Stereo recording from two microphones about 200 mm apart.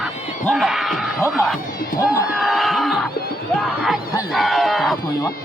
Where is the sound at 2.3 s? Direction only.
Centre (ahead or behind).